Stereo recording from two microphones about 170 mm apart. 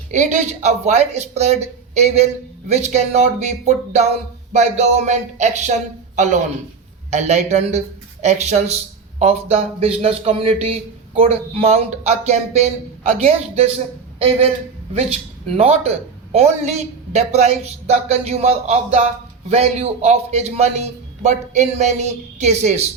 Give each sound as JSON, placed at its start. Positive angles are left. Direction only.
{"t": 0.1, "sound": "speech", "side_deg": -45}